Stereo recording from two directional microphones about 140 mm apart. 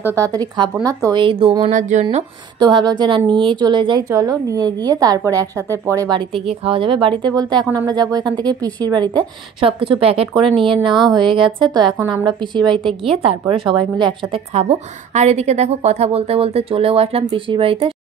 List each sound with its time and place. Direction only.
0.0 s a woman's voice: 20° right (ahead or behind)
1.2 s a woman's voice: 40° right (ahead or behind)
1.6 s speech: 60° right (ahead or behind)
2.6 s a woman's voice: 30° right (ahead or behind)
6.3 s a woman's voice: 45° right (ahead or behind)
8.6 s a woman's voice: 10° left (ahead or behind)
9.6 s a woman's voice: 40° right (ahead or behind)
14.3 s a woman's voice: 50° right (ahead or behind)